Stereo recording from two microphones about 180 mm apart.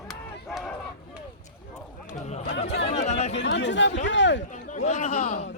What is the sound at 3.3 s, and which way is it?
Speech, 80° left.